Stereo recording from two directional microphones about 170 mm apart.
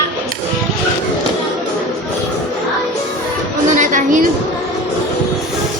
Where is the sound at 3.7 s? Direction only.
50° right (ahead or behind).